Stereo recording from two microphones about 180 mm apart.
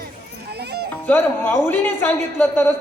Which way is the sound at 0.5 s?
65° right (ahead or behind).